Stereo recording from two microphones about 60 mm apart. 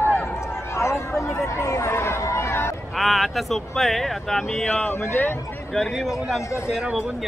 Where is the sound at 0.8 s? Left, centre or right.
Left.